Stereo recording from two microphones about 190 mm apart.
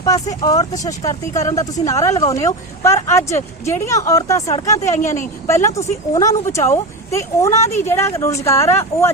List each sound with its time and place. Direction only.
0.0 s speech: 20° left (ahead or behind)
1.3 s a woman's voice: 40° left (ahead or behind)
1.9 s speech: 15° left (ahead or behind)
5.0 s a woman's voice: 40° left (ahead or behind)
5.5 s speech: 15° left (ahead or behind)